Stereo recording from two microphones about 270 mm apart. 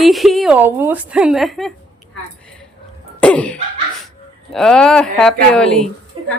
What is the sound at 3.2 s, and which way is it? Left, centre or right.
Speech, centre.